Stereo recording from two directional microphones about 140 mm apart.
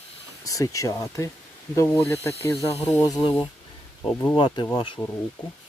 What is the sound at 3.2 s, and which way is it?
Speech, 40° left (ahead or behind).